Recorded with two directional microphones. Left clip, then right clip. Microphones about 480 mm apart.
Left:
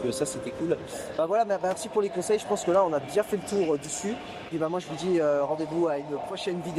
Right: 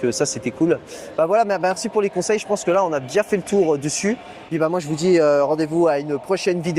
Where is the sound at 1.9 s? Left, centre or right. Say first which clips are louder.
Right 6 dB; right.